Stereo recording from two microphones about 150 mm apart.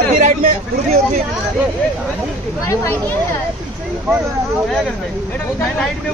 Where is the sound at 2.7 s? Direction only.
15° left (ahead or behind).